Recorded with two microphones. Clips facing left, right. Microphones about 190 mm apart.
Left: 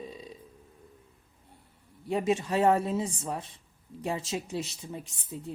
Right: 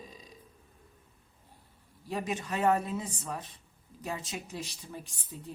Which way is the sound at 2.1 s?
25° left (ahead or behind).